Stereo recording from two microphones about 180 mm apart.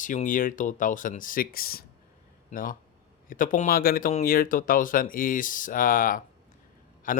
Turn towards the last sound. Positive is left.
turn(degrees=50)  # may be behind; listen again after turning